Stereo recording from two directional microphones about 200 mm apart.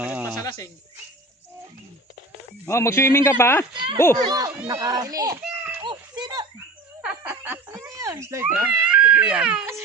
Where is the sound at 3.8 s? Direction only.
25° right (ahead or behind).